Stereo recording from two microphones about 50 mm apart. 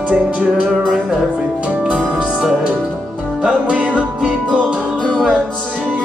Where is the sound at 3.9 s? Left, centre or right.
Right.